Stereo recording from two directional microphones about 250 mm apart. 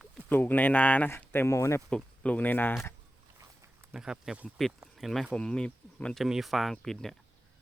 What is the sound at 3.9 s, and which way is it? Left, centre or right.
Speech, centre.